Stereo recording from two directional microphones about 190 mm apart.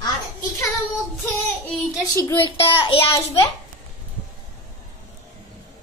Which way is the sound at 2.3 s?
25° left (ahead or behind).